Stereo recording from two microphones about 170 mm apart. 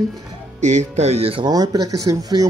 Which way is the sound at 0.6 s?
40° right (ahead or behind).